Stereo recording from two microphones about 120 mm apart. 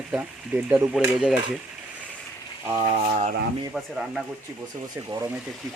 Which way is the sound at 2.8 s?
75° right (ahead or behind).